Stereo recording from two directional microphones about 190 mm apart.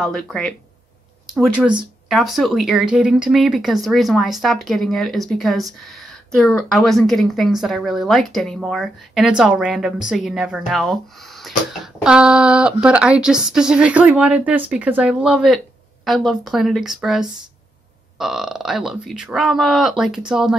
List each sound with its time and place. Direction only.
0.0 s speech: centre (ahead or behind)